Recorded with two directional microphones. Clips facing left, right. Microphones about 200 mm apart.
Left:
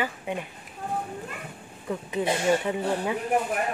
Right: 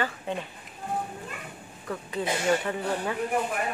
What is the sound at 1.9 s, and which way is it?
Speech, 20° left (ahead or behind).